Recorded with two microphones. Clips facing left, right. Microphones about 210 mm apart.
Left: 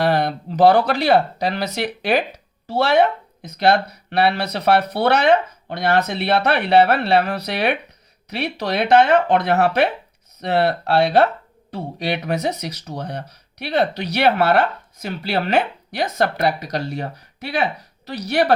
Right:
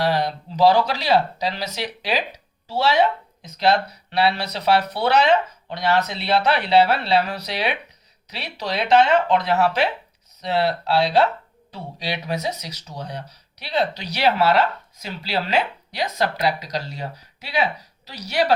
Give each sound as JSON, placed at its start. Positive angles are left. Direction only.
{"t": 0.0, "sound": "speech", "side_deg": 55}